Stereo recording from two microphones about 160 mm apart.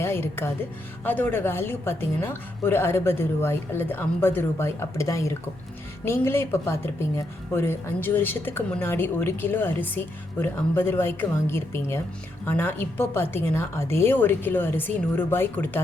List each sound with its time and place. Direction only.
0.0 s a woman's voice: 15° left (ahead or behind)